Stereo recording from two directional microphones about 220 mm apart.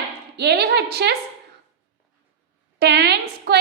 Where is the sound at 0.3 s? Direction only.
50° right (ahead or behind).